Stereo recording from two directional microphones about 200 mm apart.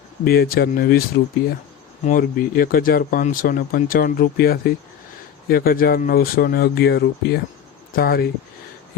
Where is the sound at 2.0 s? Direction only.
45° left (ahead or behind).